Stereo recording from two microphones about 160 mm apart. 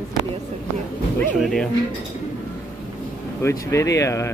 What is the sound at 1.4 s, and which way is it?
Speech, centre (ahead or behind).